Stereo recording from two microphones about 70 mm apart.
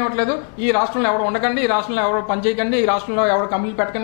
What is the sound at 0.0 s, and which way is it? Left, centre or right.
A man's voice, centre.